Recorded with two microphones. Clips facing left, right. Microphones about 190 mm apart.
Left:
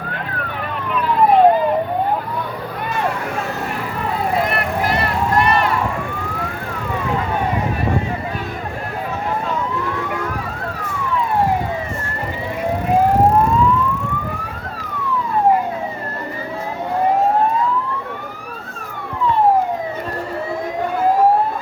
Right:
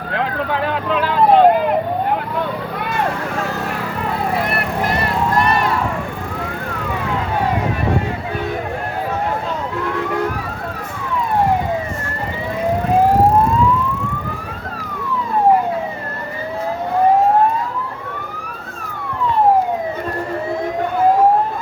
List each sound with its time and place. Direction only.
0.1 s vehicle: 90° right